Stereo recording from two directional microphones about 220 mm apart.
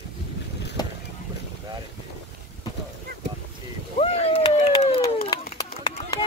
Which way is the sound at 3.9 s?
25° left (ahead or behind).